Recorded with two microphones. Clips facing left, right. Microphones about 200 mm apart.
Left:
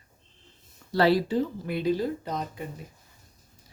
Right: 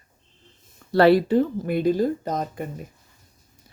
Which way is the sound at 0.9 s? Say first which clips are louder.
Right 6 dB; 60° right (ahead or behind).